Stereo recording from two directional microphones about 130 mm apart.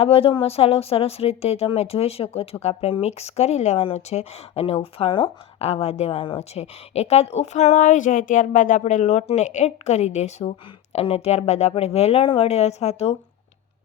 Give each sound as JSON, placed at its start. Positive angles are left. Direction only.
{"t": 0.0, "sound": "speech", "side_deg": 45}